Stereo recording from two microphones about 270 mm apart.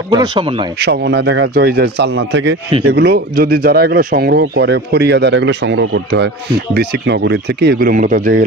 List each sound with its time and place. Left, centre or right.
0.1 s speech: centre
0.7 s speech: right